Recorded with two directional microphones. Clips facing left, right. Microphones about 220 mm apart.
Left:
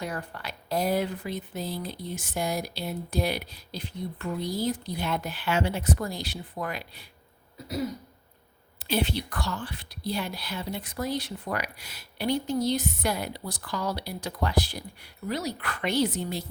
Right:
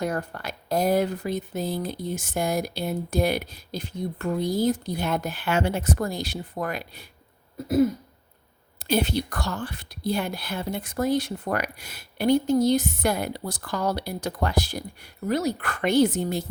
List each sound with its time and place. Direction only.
0.0 s a woman's voice: 45° right (ahead or behind)
8.8 s a woman's voice: 45° right (ahead or behind)